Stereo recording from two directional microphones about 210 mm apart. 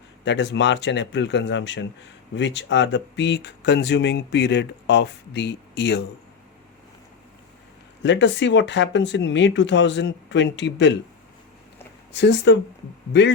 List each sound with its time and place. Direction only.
0.3 s speech: 55° left (ahead or behind)
8.0 s speech: 60° left (ahead or behind)
12.1 s speech: 55° left (ahead or behind)